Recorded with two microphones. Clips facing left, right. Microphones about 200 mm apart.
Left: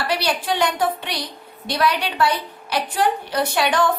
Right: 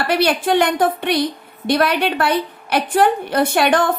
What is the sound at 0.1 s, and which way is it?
A woman's voice, 55° right (ahead or behind).